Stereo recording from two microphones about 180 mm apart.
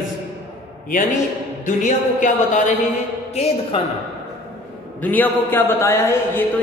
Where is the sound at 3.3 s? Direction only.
35° left (ahead or behind).